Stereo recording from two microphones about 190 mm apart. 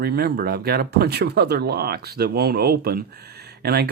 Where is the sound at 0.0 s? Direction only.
55° right (ahead or behind).